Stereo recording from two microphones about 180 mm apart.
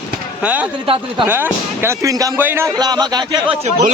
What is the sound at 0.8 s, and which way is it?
Speech, 30° right (ahead or behind).